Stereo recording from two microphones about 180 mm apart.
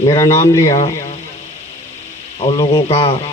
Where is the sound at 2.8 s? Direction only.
30° left (ahead or behind).